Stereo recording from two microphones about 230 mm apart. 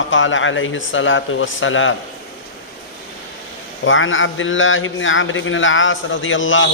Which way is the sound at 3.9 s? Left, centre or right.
Left.